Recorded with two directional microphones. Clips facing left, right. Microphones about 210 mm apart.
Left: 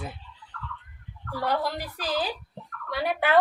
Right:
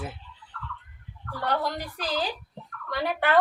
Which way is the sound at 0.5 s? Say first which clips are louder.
Left 1 dB; 45° left (ahead or behind).